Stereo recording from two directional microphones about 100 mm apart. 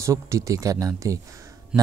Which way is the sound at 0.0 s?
30° right (ahead or behind).